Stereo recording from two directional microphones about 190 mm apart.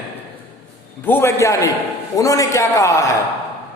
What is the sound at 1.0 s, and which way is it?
A man's voice, 10° left (ahead or behind).